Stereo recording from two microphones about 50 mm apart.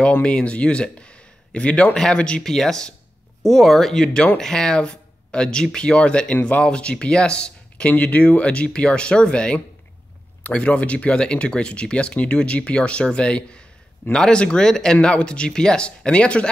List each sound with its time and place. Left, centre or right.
0.0 s speech: left
2.4 s speech: centre; by 16.4 s left